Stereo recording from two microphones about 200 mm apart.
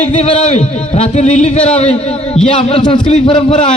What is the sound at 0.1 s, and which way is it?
A man's voice, 30° left (ahead or behind).